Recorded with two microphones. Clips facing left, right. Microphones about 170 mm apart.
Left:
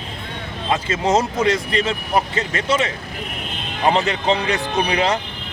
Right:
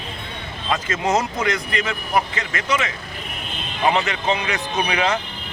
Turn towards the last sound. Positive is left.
turn(degrees=35)  # may be behind; listen again after turning